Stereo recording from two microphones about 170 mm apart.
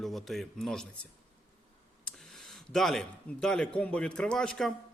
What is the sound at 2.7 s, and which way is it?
A man's voice, centre (ahead or behind).